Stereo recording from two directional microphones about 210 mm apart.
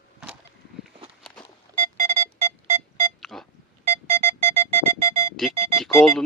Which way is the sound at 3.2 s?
Centre (ahead or behind).